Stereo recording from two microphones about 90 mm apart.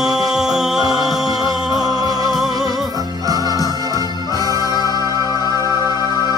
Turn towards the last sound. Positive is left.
turn(degrees=45)  # may be behind; listen again after turning